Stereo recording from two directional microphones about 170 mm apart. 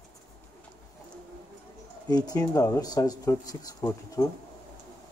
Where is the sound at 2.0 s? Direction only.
25° left (ahead or behind).